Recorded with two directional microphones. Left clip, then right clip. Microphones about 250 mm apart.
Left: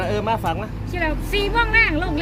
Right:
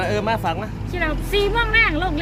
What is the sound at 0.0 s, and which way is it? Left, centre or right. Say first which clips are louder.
Speech: right 1 dB; centre.